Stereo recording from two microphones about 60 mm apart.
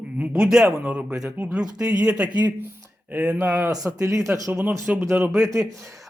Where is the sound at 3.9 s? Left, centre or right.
Right.